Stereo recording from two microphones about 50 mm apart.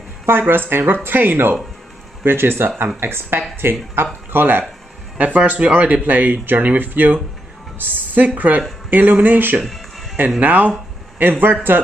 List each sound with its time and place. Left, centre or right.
0.3 s speech: right
5.1 s a woman's voice: right
9.6 s music: centre
10.4 s speech: right